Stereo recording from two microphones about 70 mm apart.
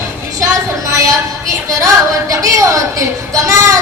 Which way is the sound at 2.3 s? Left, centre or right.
Right.